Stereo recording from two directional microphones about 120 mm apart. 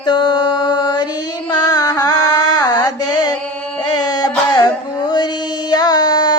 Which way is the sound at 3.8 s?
35° left (ahead or behind).